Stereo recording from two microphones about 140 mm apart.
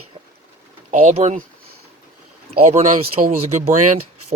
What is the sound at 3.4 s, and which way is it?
Speech, 50° right (ahead or behind).